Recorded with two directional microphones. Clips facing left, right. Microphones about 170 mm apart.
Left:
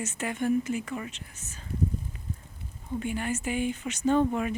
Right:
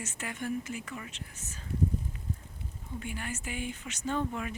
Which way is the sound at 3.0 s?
25° left (ahead or behind).